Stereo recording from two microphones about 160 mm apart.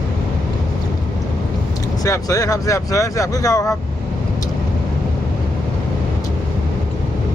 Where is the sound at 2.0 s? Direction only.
20° left (ahead or behind).